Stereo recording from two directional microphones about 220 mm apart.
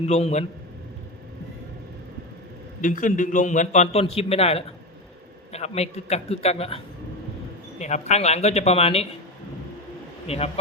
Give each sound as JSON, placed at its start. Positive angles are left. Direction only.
{"t": 0.0, "sound": "a man's voice", "side_deg": 30}
{"t": 2.8, "sound": "a man's voice", "side_deg": 35}
{"t": 10.2, "sound": "a man's voice", "side_deg": 25}